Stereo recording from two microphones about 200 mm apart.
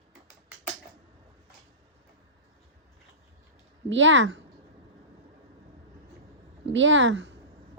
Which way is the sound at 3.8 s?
70° right (ahead or behind).